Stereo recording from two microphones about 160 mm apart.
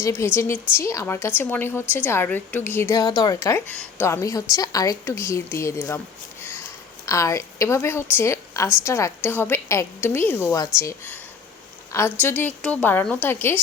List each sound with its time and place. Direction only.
0.0 s a woman's voice: 15° left (ahead or behind)
7.0 s a woman's voice: 20° left (ahead or behind)